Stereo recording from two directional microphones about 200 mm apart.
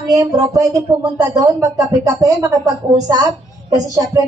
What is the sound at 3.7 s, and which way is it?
Speech, 15° right (ahead or behind).